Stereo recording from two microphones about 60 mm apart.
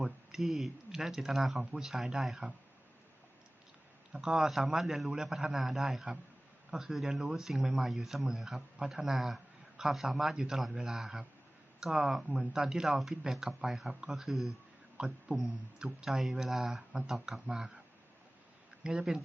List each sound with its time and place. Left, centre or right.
0.3 s a man's voice: centre
4.1 s a man's voice: centre
14.9 s a man's voice: centre
18.8 s speech: centre